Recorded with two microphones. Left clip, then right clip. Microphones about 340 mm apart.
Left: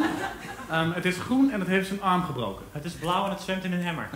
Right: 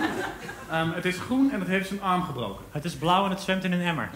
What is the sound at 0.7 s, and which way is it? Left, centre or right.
A man's voice, centre.